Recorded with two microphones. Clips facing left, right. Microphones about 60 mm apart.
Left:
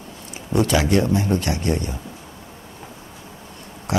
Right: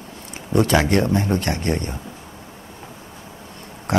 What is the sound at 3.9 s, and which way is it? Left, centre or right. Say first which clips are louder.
Pig: right 2 dB; right.